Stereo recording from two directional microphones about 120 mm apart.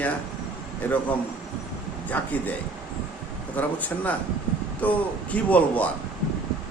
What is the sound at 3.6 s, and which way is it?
Speech, 10° left (ahead or behind).